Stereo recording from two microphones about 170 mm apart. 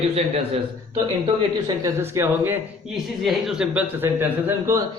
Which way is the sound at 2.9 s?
Centre (ahead or behind).